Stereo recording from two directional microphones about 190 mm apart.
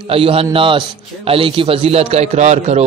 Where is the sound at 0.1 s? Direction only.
30° right (ahead or behind).